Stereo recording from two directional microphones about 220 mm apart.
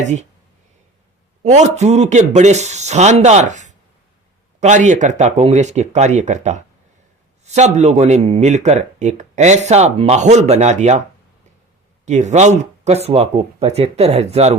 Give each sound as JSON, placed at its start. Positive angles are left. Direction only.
{"t": 0.0, "sound": "speech", "side_deg": -30}
{"t": 1.5, "sound": "speech", "side_deg": -30}
{"t": 12.0, "sound": "speech", "side_deg": -30}